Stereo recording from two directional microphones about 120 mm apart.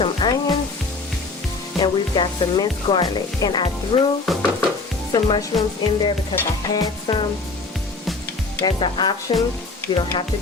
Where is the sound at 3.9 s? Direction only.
50° left (ahead or behind).